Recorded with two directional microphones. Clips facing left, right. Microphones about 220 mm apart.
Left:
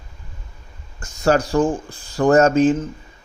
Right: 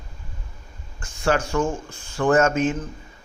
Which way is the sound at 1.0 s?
40° left (ahead or behind).